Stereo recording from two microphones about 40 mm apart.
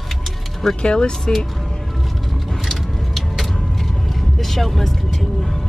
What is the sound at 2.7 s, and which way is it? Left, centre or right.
Music, centre.